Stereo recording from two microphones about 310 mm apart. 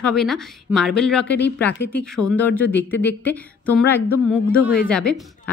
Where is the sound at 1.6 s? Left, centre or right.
Centre.